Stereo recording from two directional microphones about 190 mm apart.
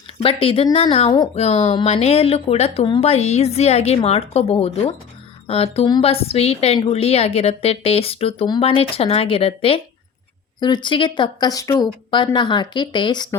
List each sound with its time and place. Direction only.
0.2 s speech: 30° left (ahead or behind)